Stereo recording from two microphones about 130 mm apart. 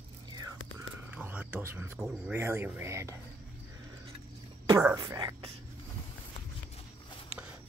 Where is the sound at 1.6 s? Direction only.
20° right (ahead or behind).